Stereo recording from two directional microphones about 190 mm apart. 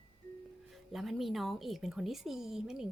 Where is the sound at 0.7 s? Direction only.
Centre (ahead or behind).